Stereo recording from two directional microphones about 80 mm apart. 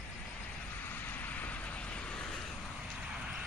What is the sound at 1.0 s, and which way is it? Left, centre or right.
Vehicle, left.